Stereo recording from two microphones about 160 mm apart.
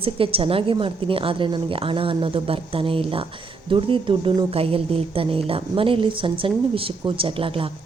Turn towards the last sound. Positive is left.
turn(degrees=-35)  # may be behind; listen again after turning